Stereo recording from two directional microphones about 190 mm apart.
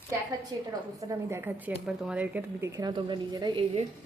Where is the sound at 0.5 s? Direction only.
25° right (ahead or behind).